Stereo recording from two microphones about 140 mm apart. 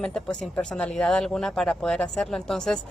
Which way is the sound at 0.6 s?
5° left (ahead or behind).